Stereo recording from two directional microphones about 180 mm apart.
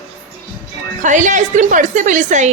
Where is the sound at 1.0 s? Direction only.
45° right (ahead or behind).